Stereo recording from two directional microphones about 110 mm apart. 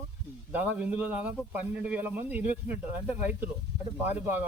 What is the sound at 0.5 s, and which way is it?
Speech, 15° right (ahead or behind).